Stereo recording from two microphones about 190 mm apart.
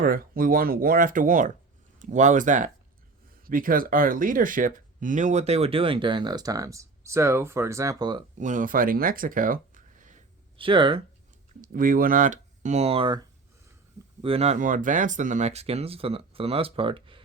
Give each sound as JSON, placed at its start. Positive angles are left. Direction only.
{"t": 0.0, "sound": "speech", "side_deg": -50}
{"t": 8.4, "sound": "speech", "side_deg": -40}
{"t": 10.6, "sound": "speech", "side_deg": -25}
{"t": 11.6, "sound": "speech", "side_deg": -45}